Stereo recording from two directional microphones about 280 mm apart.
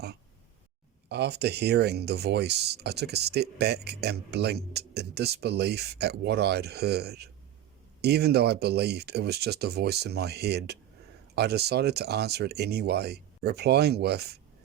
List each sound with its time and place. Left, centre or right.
1.0 s speech: right